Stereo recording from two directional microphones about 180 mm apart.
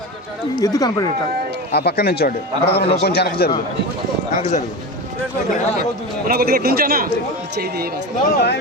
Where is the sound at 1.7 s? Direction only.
65° left (ahead or behind).